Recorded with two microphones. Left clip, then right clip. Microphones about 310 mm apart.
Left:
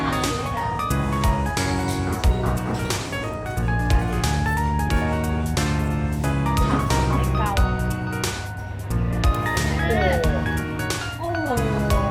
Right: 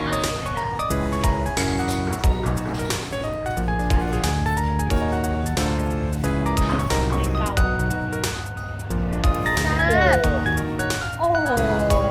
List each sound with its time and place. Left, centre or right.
9.5 s music: centre
9.9 s music: right